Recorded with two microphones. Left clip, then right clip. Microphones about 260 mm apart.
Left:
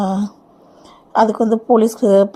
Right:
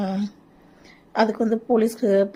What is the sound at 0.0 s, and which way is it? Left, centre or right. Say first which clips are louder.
A woman's voice: left 8 dB; centre.